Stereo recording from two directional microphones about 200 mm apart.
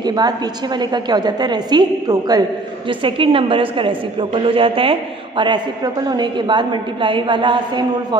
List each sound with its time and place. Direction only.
0.0 s a woman's voice: 20° right (ahead or behind)
6.0 s a woman's voice: 20° right (ahead or behind)